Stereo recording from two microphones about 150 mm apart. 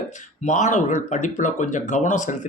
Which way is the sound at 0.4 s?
55° left (ahead or behind).